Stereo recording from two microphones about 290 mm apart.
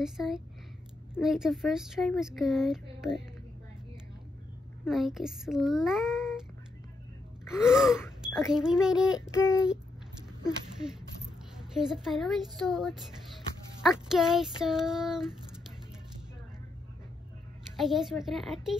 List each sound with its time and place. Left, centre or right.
0.0 s speech: centre
4.8 s speech: centre
7.4 s speech: centre
11.5 s speech: centre
17.7 s speech: centre